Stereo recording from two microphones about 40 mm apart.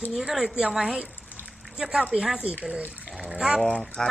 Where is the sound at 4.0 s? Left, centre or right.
Centre.